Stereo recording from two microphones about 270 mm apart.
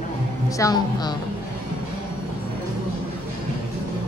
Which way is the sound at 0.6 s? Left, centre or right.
Centre.